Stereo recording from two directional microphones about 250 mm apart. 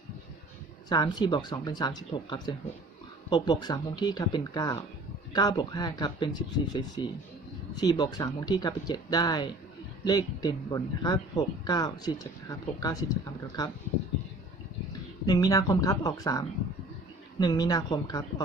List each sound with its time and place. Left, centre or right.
0.9 s speech: centre
15.3 s speech: centre
17.4 s speech: centre